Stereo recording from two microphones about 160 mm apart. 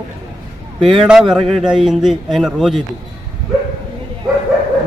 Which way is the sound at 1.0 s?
Centre (ahead or behind).